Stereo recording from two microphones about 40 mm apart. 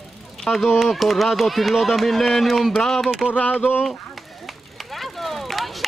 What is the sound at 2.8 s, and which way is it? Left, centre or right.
Speech, centre.